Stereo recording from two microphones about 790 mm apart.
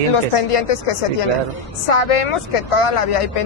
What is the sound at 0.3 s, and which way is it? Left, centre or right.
Speech, left.